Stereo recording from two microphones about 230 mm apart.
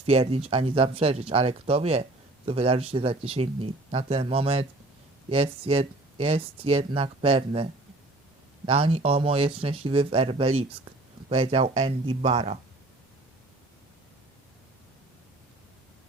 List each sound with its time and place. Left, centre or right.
0.0 s speech: right